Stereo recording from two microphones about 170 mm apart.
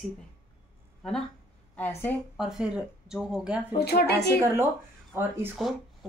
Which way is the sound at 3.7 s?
70° left (ahead or behind).